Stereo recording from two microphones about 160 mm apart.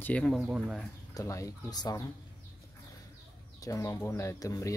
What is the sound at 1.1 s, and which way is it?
Speech, 20° left (ahead or behind).